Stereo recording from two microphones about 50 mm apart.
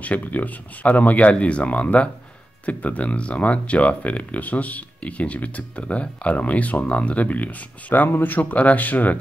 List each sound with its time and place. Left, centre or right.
0.0 s speech: left
7.9 s speech: left